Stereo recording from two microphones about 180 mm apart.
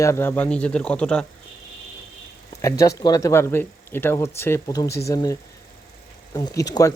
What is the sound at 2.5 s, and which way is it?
Speech, 20° left (ahead or behind).